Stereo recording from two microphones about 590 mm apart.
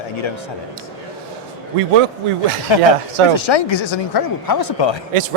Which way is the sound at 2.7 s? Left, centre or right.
Left.